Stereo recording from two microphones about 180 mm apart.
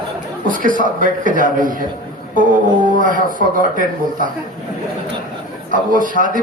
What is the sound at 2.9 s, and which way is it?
A man's voice, 50° right (ahead or behind).